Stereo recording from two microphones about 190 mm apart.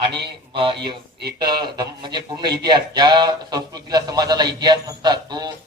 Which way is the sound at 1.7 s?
20° right (ahead or behind).